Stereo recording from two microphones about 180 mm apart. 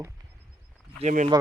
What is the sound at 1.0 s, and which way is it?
Speech, 45° right (ahead or behind).